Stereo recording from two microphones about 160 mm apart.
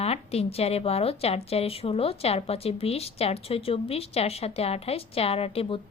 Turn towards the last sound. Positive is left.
turn(degrees=35)  # may be behind; listen again after turning